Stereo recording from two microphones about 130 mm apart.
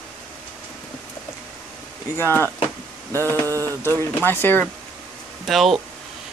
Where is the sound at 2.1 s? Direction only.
15° left (ahead or behind).